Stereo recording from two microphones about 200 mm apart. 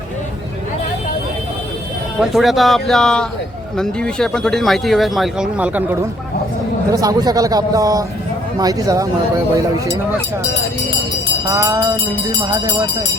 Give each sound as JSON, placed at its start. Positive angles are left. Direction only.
{"t": 2.3, "sound": "speech", "side_deg": 0}
{"t": 6.9, "sound": "a man's voice", "side_deg": -15}
{"t": 11.4, "sound": "a man's voice", "side_deg": -15}